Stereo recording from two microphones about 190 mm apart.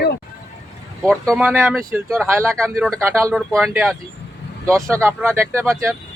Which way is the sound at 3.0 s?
15° right (ahead or behind).